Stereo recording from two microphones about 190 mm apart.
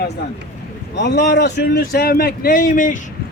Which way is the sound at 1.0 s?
60° left (ahead or behind).